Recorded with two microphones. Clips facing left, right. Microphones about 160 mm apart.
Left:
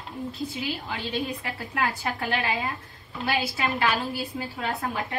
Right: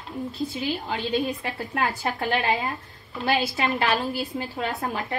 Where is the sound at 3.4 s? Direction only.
25° right (ahead or behind).